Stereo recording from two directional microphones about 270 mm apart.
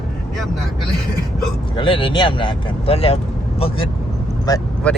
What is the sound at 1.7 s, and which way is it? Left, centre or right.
Speech, centre.